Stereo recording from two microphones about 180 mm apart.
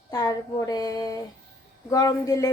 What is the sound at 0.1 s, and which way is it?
A woman's voice, 20° left (ahead or behind).